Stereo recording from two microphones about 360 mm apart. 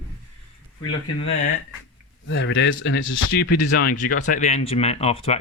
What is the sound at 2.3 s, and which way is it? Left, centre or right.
Speech, left.